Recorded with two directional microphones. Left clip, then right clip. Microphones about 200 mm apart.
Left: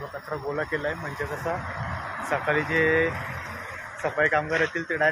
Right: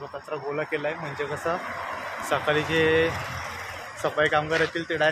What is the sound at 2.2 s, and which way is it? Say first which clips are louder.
Speech: right 1 dB; 15° right (ahead or behind).